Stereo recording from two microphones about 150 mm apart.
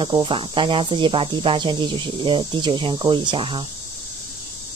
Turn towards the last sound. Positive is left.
turn(degrees=-35)  # may be behind; listen again after turning